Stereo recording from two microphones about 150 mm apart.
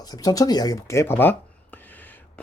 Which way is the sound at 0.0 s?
25° left (ahead or behind).